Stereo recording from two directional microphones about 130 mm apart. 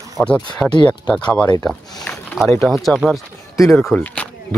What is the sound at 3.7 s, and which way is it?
Speech, 10° left (ahead or behind).